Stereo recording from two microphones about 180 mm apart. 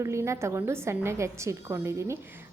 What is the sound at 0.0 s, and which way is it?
A woman's voice, 15° right (ahead or behind).